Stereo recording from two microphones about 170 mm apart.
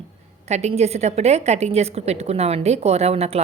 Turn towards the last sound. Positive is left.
turn(degrees=-35)  # may be behind; listen again after turning